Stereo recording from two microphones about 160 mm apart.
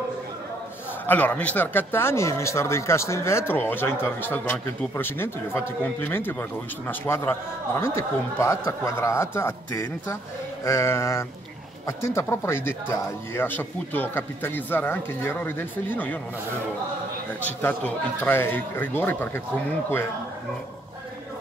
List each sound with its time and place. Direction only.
1.0 s speech: 10° left (ahead or behind)
17.4 s speech: 10° left (ahead or behind)